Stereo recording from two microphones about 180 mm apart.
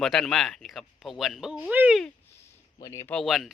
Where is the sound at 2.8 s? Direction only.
20° left (ahead or behind).